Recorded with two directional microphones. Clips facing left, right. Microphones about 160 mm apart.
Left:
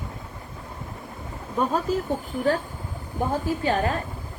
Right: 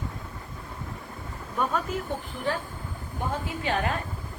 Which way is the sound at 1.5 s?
30° left (ahead or behind).